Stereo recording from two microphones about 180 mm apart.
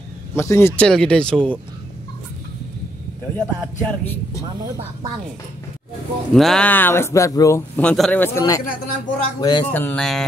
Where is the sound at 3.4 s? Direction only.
10° left (ahead or behind).